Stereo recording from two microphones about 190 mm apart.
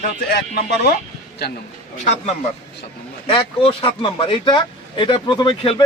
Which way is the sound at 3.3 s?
30° left (ahead or behind).